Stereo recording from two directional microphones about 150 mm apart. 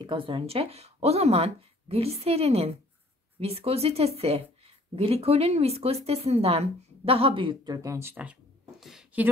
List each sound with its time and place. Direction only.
0.0 s a woman's voice: 35° right (ahead or behind); by 9.3 s 5° right (ahead or behind)